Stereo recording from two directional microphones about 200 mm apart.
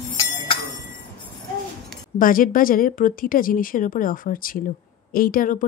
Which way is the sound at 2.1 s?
45° left (ahead or behind).